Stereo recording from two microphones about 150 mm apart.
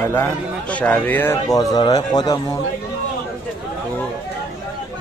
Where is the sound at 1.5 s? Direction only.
25° left (ahead or behind).